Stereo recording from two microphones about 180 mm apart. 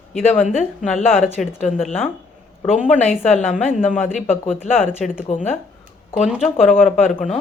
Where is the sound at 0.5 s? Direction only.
40° left (ahead or behind).